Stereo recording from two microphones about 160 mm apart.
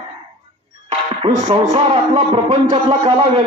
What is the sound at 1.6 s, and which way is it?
Speech, 40° right (ahead or behind).